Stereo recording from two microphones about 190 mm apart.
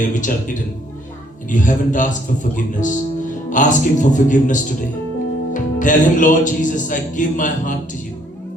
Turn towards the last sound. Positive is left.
turn(degrees=40)  # may be behind; listen again after turning